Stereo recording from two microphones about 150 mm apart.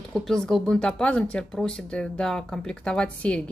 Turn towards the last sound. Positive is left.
turn(degrees=10)  # may be behind; listen again after turning